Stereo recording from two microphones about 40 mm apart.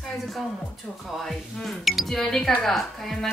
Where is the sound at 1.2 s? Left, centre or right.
Centre.